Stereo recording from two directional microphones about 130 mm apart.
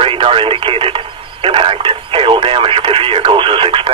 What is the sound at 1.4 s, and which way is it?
Speech, 45° right (ahead or behind).